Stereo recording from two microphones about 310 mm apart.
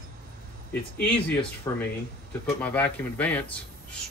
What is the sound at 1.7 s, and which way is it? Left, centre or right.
Speech, centre.